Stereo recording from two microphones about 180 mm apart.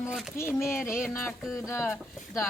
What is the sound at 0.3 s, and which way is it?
Speech, 15° left (ahead or behind).